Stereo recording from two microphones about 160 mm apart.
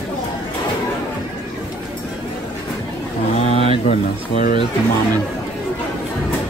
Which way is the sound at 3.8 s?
55° left (ahead or behind).